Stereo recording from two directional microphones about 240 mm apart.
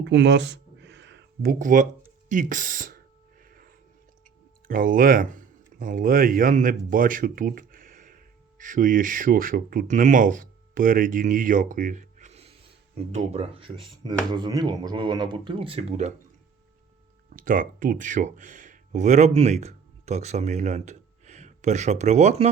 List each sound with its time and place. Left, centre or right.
0.0 s a sound: right
2.3 s speech: right
4.7 s speech: right
17.2 s speech: right